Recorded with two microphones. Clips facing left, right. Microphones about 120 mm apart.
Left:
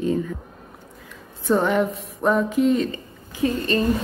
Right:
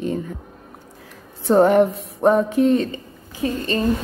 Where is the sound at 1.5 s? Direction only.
45° right (ahead or behind).